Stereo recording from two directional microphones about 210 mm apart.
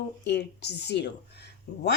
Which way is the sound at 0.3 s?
55° left (ahead or behind).